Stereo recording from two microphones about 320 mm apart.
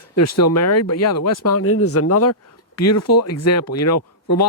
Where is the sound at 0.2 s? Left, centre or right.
Left.